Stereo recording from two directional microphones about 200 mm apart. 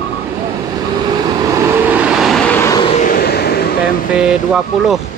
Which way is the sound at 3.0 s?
45° left (ahead or behind).